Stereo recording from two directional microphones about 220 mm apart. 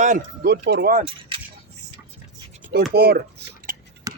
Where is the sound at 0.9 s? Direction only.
25° right (ahead or behind).